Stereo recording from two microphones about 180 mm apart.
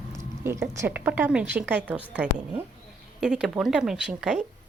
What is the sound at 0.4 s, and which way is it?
A woman's voice, 15° right (ahead or behind).